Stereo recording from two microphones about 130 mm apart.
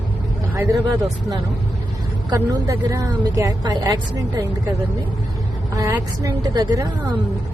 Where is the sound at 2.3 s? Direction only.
25° right (ahead or behind).